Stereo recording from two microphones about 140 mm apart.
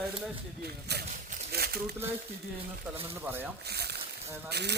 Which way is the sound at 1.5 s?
90° right.